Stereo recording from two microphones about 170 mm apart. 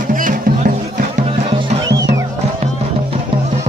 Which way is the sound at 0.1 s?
50° right (ahead or behind).